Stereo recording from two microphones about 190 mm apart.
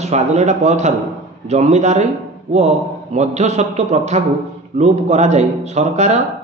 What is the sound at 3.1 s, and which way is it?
Speech, 35° right (ahead or behind).